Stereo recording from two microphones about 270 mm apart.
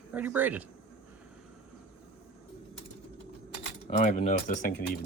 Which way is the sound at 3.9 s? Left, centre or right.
Left.